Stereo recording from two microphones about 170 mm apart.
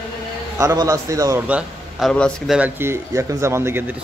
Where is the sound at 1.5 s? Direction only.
Centre (ahead or behind).